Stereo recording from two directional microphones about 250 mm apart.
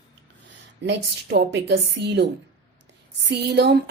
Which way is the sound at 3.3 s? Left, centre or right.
Right.